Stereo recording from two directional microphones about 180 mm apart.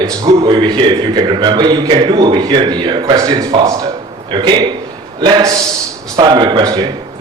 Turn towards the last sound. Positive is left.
turn(degrees=-20)  # may be behind; listen again after turning